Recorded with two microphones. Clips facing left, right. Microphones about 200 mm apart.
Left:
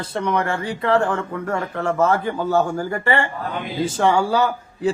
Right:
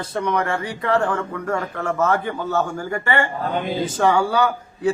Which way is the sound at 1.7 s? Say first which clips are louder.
Left 3 dB; 30° left (ahead or behind).